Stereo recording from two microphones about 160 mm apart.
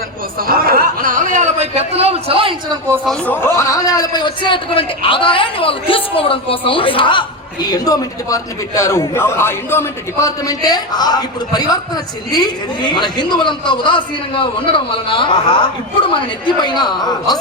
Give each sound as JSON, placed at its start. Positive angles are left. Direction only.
{"t": 0.4, "sound": "a man's voice", "side_deg": -65}
{"t": 3.1, "sound": "a man's voice", "side_deg": 10}